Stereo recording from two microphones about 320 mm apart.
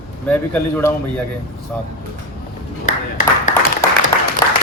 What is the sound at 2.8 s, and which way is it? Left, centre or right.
Clapping, left.